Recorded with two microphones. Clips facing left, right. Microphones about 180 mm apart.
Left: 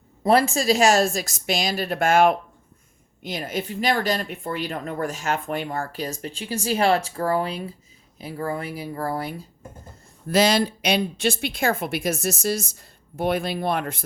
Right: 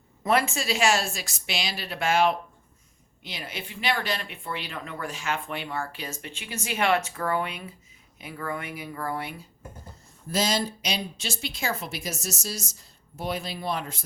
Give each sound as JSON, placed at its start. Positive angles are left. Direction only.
{"t": 0.2, "sound": "a woman's voice", "side_deg": 35}
{"t": 10.2, "sound": "speech", "side_deg": 65}